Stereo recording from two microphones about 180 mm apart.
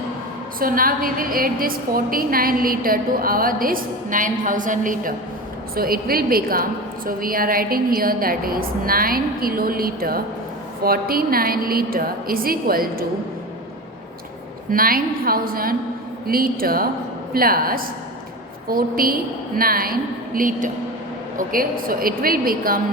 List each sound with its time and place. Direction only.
0.6 s a woman's voice: 50° right (ahead or behind)
14.7 s a woman's voice: 55° right (ahead or behind)